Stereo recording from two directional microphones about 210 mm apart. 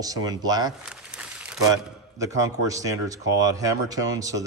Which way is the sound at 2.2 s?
15° right (ahead or behind).